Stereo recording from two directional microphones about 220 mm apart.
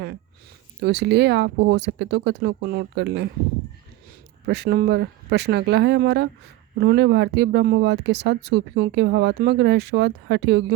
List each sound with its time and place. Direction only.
0.8 s speech: 50° right (ahead or behind)
4.4 s speech: 50° right (ahead or behind)